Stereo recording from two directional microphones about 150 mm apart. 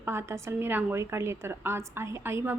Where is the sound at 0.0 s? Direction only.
15° right (ahead or behind).